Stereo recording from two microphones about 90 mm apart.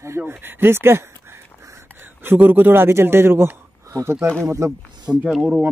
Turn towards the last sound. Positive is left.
turn(degrees=-5)  # may be behind; listen again after turning